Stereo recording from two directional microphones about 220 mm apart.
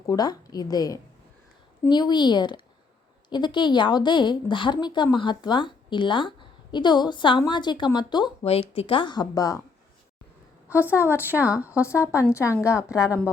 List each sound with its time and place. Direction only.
0.1 s a woman's voice: 15° left (ahead or behind)
11.1 s speech: 10° right (ahead or behind)
11.8 s a woman's voice: 15° left (ahead or behind)
12.9 s speech: 5° right (ahead or behind)